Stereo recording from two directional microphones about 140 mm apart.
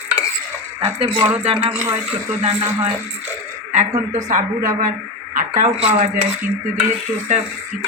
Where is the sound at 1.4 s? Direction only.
40° right (ahead or behind).